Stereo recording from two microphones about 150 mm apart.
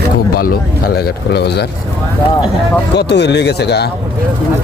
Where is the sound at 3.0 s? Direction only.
90° left.